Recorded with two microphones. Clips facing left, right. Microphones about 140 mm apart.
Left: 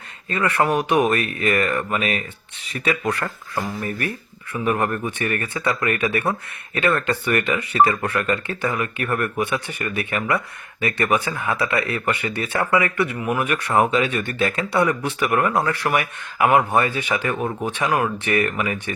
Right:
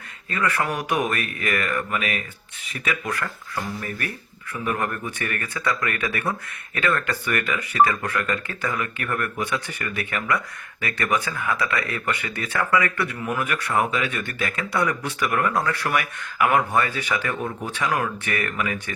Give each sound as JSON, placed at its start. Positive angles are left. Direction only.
{"t": 0.3, "sound": "speech", "side_deg": 25}
{"t": 4.6, "sound": "speech", "side_deg": 20}